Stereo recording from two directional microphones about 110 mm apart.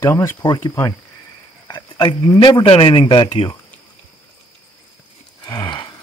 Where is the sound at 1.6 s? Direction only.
40° left (ahead or behind).